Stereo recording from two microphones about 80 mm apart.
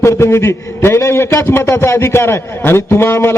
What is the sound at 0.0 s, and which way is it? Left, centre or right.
A man's voice, left.